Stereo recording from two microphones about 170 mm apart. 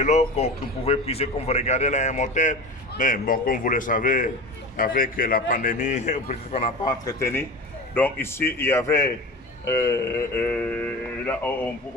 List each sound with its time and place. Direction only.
0.0 s a man's voice: 40° left (ahead or behind)
7.0 s speech: 20° left (ahead or behind)